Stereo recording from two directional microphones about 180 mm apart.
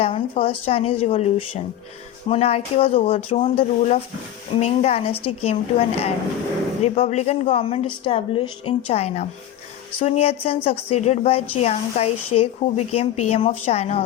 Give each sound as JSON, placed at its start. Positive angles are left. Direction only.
{"t": 0.0, "sound": "a woman's voice", "side_deg": 30}